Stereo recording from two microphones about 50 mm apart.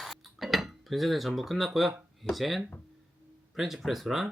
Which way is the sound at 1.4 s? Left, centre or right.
Centre.